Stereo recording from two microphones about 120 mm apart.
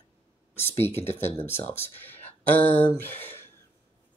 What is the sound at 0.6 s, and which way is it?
Speech, 20° left (ahead or behind).